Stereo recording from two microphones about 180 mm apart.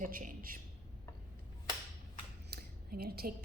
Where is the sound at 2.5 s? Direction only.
55° right (ahead or behind).